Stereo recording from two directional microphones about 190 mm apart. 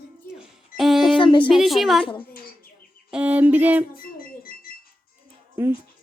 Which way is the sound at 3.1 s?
5° right (ahead or behind).